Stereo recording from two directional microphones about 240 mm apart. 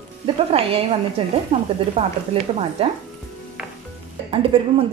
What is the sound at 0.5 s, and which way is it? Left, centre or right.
A woman's voice, right.